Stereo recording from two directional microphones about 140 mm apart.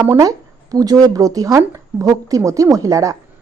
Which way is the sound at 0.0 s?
25° right (ahead or behind).